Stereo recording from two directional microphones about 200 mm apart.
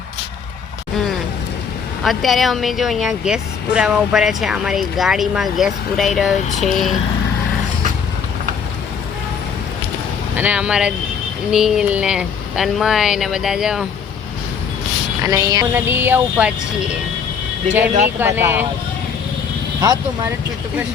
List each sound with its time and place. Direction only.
2.0 s speech: centre (ahead or behind)
10.3 s speech: 5° right (ahead or behind)
15.2 s speech: 15° right (ahead or behind)
17.7 s speech: 10° right (ahead or behind)
19.8 s speech: 20° right (ahead or behind)